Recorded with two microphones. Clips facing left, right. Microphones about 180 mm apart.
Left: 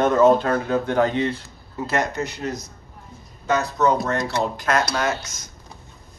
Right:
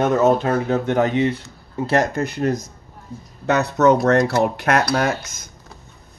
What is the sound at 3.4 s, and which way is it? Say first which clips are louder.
Speech: right 4 dB; 70° right (ahead or behind).